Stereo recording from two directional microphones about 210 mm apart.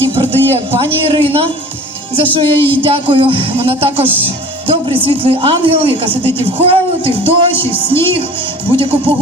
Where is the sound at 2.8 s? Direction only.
25° right (ahead or behind).